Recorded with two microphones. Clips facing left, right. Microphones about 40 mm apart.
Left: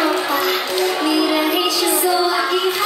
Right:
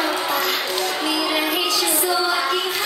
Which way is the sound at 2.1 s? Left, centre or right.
Centre.